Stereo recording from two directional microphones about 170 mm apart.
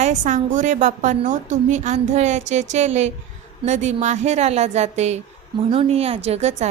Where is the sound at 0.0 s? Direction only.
45° right (ahead or behind).